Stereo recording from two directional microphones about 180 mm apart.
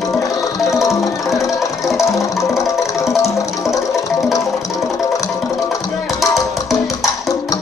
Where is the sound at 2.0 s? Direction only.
15° left (ahead or behind).